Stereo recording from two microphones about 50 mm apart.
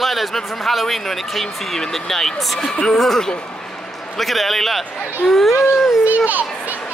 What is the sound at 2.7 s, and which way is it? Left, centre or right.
Speech, centre.